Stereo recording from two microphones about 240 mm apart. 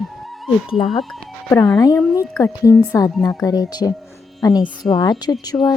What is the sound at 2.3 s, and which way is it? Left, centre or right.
A woman's voice, centre.